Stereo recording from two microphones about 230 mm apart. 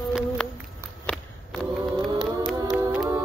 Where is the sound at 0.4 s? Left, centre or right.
Centre.